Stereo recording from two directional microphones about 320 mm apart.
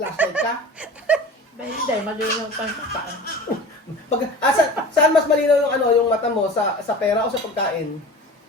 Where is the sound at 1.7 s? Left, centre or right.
Left.